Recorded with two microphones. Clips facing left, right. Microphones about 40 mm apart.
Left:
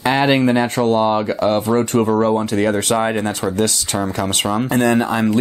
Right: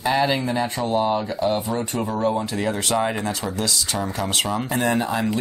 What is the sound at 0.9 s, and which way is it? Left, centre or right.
Speech, left.